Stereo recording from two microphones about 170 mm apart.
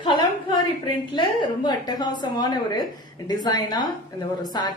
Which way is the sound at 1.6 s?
25° left (ahead or behind).